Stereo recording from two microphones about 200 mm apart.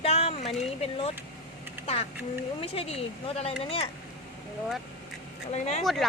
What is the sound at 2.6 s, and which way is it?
Speech, 30° left (ahead or behind).